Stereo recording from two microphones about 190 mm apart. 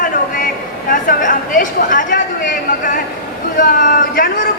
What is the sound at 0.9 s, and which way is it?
A woman's voice, 45° left (ahead or behind).